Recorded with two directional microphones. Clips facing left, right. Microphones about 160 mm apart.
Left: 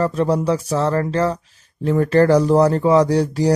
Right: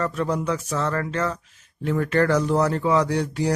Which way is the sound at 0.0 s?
30° left (ahead or behind).